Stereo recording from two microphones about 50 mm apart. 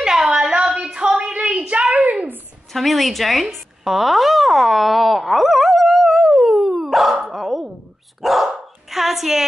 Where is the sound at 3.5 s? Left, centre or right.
Centre.